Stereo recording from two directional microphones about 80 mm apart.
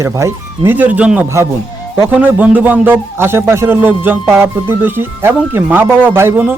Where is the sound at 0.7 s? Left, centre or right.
Right.